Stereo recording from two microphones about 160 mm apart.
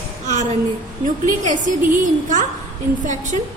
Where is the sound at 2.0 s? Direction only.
50° right (ahead or behind).